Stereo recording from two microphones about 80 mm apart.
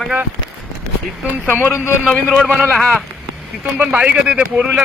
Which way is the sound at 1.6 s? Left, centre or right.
Left.